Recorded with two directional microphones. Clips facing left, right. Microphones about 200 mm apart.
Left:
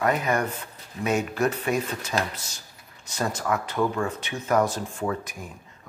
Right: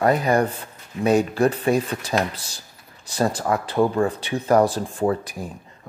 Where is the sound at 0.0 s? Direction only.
35° right (ahead or behind).